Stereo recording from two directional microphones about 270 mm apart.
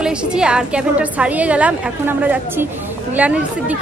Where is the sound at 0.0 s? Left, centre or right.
Centre.